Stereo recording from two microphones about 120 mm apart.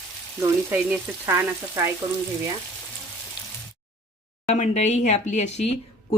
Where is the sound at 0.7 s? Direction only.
10° right (ahead or behind).